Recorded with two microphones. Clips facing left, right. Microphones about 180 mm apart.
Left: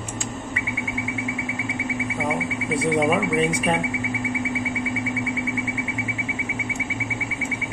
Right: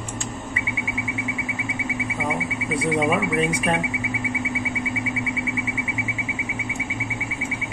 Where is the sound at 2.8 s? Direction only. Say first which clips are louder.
Left 1 dB; centre (ahead or behind).